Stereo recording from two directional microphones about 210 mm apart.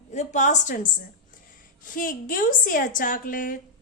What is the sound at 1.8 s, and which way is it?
Speech, 40° left (ahead or behind).